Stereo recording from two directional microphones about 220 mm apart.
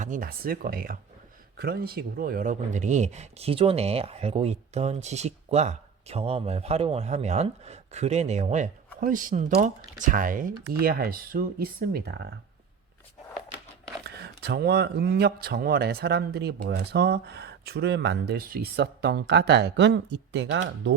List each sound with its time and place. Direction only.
0.0 s speech: 40° right (ahead or behind)
14.2 s speech: 45° right (ahead or behind)